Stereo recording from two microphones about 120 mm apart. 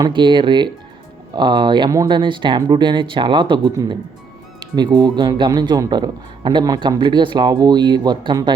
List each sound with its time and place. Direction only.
0.0 s speech: 40° right (ahead or behind)